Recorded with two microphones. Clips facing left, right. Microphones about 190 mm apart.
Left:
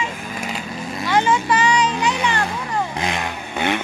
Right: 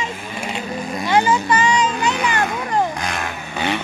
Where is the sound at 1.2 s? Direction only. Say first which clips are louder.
Right 1 dB; centre (ahead or behind).